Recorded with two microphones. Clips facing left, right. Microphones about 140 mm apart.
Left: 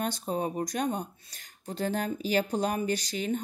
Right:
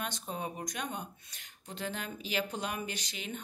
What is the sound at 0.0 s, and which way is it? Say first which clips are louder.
A woman's voice: left 8 dB; 35° left (ahead or behind).